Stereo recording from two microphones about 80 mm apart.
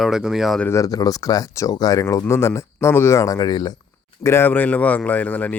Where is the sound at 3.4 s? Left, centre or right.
Left.